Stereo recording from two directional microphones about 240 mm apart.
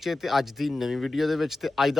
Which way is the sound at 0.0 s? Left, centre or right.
Centre.